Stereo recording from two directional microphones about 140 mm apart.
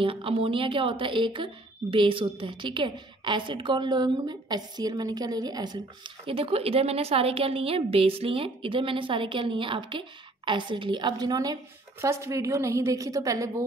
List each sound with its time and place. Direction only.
0.0 s a woman's voice: 40° right (ahead or behind); by 13.5 s 25° right (ahead or behind)